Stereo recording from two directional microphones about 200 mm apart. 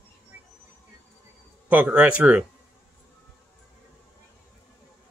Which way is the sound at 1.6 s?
5° right (ahead or behind).